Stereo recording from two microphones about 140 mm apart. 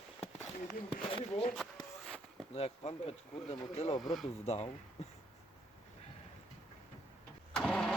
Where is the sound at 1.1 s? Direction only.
40° left (ahead or behind).